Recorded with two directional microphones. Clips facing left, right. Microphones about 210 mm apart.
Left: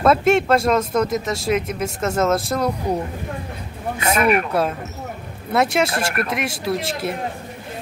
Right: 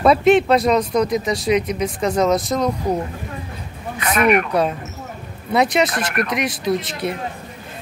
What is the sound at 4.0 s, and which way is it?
Speech, 25° left (ahead or behind).